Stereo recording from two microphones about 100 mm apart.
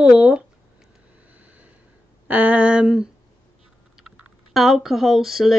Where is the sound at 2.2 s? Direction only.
15° right (ahead or behind).